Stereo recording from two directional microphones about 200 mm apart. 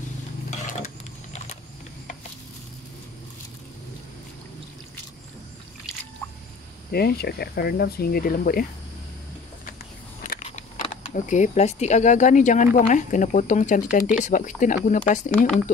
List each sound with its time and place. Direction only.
0.7 s vehicle: 35° left (ahead or behind)
6.9 s speech: 50° left (ahead or behind)
10.2 s speech: 40° left (ahead or behind)